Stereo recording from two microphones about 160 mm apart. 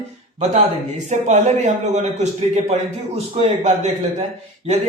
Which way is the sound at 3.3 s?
45° right (ahead or behind).